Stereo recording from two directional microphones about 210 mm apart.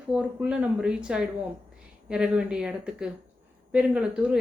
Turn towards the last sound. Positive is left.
turn(degrees=-5)  # may be behind; listen again after turning